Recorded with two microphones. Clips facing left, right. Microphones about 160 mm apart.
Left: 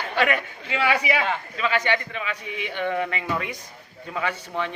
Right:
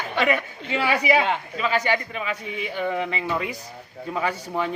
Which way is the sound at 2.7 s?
5° right (ahead or behind).